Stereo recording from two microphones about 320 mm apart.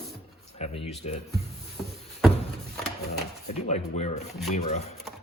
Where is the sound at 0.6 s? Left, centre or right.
Centre.